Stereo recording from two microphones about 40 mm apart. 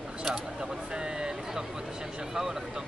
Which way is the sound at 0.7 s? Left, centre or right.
Centre.